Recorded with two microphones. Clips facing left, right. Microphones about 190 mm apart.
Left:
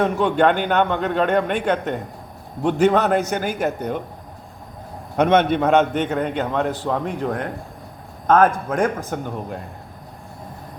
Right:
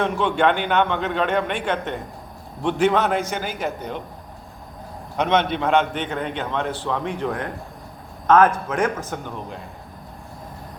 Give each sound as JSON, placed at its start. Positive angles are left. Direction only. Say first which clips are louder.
{"t": 0.0, "sound": "a man's voice", "louder": "left 3 dB", "side_deg": 45}
{"t": 5.1, "sound": "a man's voice", "louder": "left 4 dB", "side_deg": 50}